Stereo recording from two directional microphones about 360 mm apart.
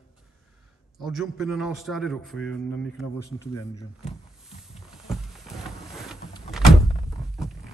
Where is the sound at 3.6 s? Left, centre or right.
Centre.